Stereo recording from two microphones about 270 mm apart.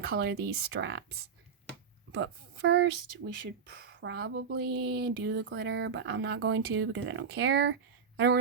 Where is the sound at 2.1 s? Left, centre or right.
Right.